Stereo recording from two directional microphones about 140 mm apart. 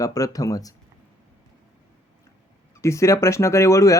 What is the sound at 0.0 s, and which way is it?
Speech, 25° left (ahead or behind).